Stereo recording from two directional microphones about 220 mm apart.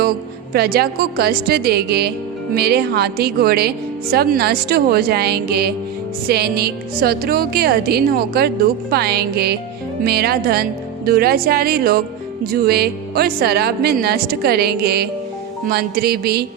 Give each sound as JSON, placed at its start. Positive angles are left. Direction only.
{"t": 0.5, "sound": "speech", "side_deg": -45}